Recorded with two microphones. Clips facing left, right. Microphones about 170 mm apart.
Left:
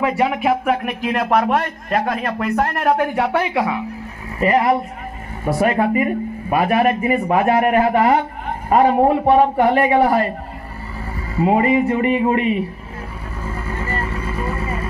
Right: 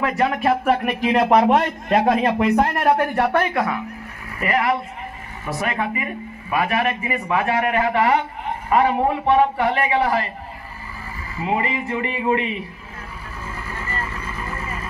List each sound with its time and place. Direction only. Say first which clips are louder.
0.0 s speech: left 2 dB; 10° left (ahead or behind)
1.1 s speech: right 2 dB; 15° right (ahead or behind)
1.9 s speech: right 4 dB; 25° right (ahead or behind)
3.0 s speech: left 1 dB; 5° left (ahead or behind)
4.4 s a man's voice: left 5 dB; 30° left (ahead or behind); by 10.3 s 55° left (ahead or behind)
11.7 s a man's voice: left 9 dB; 50° left (ahead or behind)
13.7 s vehicle: left 5 dB; 30° left (ahead or behind)